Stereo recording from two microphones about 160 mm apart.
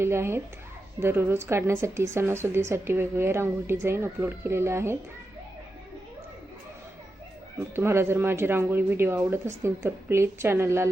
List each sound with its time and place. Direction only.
0.0 s speech: 15° right (ahead or behind)
7.8 s speech: 15° right (ahead or behind)